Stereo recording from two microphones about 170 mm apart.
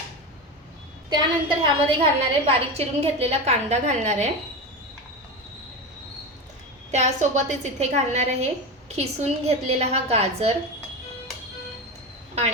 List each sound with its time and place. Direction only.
1.1 s a woman's voice: 25° right (ahead or behind)
6.9 s a woman's voice: 45° right (ahead or behind)